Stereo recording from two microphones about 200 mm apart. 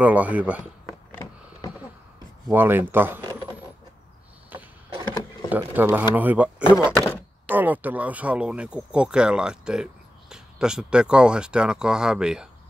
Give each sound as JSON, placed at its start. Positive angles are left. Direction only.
{"t": 0.0, "sound": "speech", "side_deg": -5}
{"t": 2.4, "sound": "speech", "side_deg": -10}
{"t": 5.5, "sound": "speech", "side_deg": -10}